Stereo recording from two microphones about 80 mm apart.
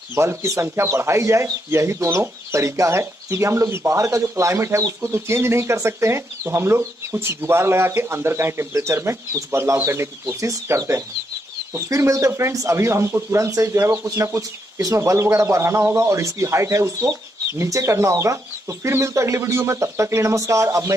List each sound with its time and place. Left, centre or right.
0.1 s speech: right